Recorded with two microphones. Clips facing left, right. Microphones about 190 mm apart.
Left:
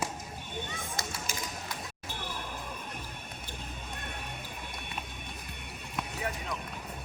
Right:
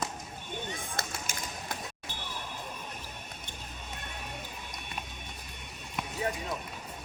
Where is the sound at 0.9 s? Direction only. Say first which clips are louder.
Left 1 dB; 50° right (ahead or behind).